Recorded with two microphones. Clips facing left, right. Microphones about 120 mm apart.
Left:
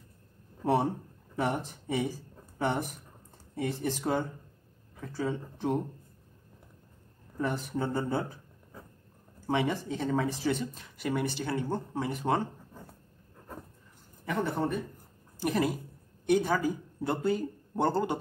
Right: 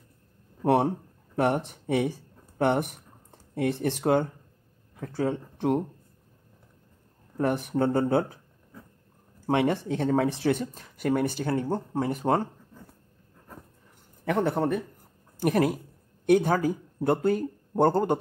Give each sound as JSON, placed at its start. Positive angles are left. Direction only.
{"t": 0.7, "sound": "speech", "side_deg": -60}
{"t": 7.3, "sound": "speech", "side_deg": -55}
{"t": 9.5, "sound": "speech", "side_deg": -60}
{"t": 14.2, "sound": "a man's voice", "side_deg": -70}
{"t": 15.3, "sound": "a man's voice", "side_deg": -55}